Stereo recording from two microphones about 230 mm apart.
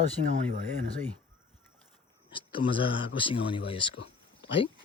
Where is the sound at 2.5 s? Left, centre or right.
Left.